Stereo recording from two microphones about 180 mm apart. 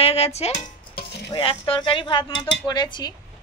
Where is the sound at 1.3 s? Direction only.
30° left (ahead or behind).